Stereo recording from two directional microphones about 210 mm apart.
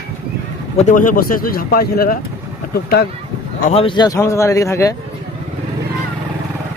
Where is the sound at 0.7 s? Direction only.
35° left (ahead or behind).